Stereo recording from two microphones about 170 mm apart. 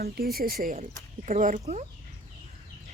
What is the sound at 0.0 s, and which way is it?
Speech, 65° right (ahead or behind).